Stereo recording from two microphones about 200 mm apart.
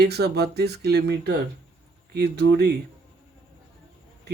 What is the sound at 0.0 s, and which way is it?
A man's voice, 55° right (ahead or behind).